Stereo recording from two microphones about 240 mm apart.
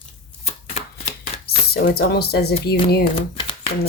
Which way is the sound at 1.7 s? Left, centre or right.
Left.